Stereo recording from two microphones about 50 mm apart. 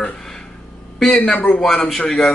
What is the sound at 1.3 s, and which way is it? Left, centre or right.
Speech, left.